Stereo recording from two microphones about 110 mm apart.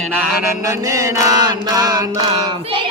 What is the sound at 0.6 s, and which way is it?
Mantra, 30° right (ahead or behind).